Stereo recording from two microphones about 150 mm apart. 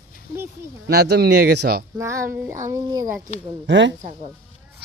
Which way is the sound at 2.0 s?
20° right (ahead or behind).